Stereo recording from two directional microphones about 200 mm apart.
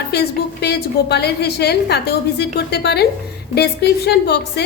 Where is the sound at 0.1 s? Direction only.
55° left (ahead or behind).